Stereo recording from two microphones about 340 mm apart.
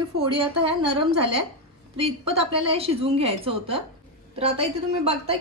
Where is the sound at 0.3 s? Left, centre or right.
Centre.